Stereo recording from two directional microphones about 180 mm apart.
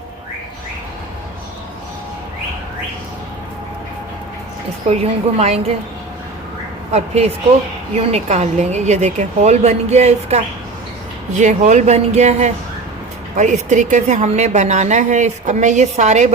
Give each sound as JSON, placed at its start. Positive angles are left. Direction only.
{"t": 4.9, "sound": "a woman's voice", "side_deg": -35}
{"t": 6.9, "sound": "a woman's voice", "side_deg": -35}